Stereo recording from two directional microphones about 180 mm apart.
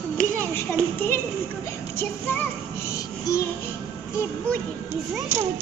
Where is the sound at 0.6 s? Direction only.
10° left (ahead or behind).